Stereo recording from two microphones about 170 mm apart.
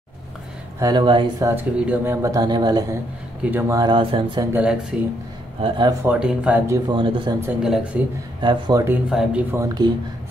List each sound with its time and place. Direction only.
0.7 s speech: 25° right (ahead or behind)
1.5 s speech: 10° right (ahead or behind)
3.4 s speech: 15° right (ahead or behind); by 4.5 s 30° right (ahead or behind)
4.5 s speech: 10° right (ahead or behind)
5.6 s speech: 25° right (ahead or behind)
6.0 s speech: 5° right (ahead or behind)
6.9 s speech: 30° right (ahead or behind)
7.4 s speech: 5° right (ahead or behind)
8.4 s speech: 25° right (ahead or behind)
8.8 s speech: 5° right (ahead or behind)